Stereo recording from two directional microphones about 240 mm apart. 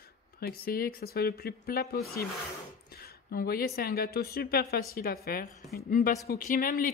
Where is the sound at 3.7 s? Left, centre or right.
Left.